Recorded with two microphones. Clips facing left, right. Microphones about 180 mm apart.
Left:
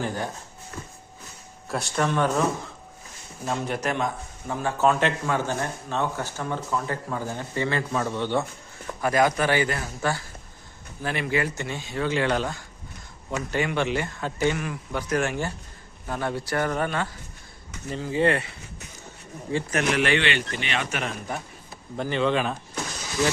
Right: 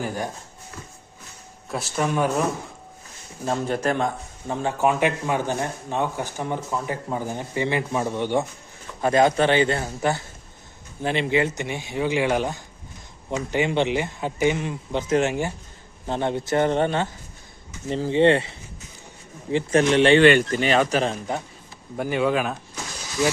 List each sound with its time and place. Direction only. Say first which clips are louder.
0.0 s speech: right 1 dB; 10° right (ahead or behind)
1.7 s speech: right 1 dB; centre (ahead or behind)
3.4 s speech: right 4 dB; 30° right (ahead or behind)
4.8 s speech: even; 15° right (ahead or behind)
9.0 s speech: right 4 dB; 25° right (ahead or behind)
13.7 s speech: right 3 dB; 20° right (ahead or behind)
20.2 s speech: right 11 dB; 45° right (ahead or behind); by 21.4 s 25° right (ahead or behind)
21.9 s speech: right 2 dB; 10° right (ahead or behind)